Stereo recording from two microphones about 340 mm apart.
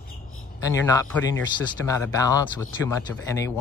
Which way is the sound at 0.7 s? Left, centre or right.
Centre.